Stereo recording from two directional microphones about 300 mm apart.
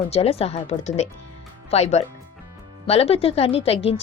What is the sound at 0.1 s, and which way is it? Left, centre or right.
Speech, centre.